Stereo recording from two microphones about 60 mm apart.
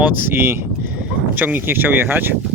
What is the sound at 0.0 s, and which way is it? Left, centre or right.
Speech, right.